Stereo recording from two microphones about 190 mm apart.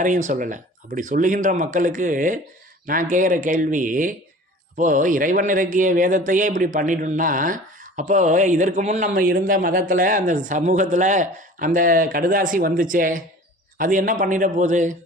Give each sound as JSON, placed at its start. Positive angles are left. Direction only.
{"t": 0.0, "sound": "speech", "side_deg": -40}